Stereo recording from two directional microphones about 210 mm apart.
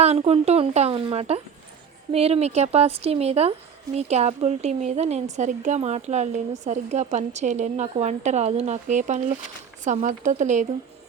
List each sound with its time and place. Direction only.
0.0 s a woman's voice: 30° right (ahead or behind)